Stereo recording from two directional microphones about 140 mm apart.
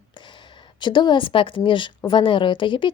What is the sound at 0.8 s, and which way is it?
Speech, 35° left (ahead or behind).